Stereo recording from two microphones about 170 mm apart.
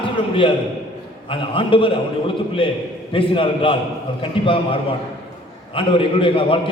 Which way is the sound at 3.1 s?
30° left (ahead or behind).